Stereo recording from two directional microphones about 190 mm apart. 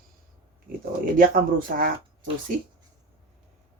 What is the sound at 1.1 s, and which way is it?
Speech, 50° right (ahead or behind).